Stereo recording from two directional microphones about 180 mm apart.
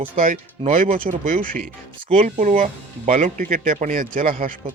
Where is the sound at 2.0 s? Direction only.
35° right (ahead or behind).